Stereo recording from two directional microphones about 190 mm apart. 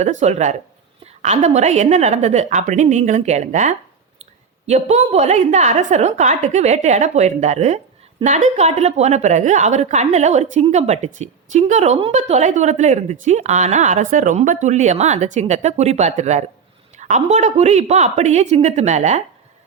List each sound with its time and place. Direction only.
0.0 s a woman's voice: 35° right (ahead or behind)